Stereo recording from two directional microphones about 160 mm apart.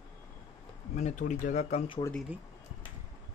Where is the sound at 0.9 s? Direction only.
50° left (ahead or behind).